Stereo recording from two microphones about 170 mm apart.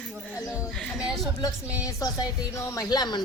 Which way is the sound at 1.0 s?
Centre (ahead or behind).